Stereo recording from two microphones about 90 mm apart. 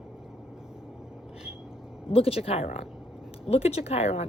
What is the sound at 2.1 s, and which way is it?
Speech, 90° left.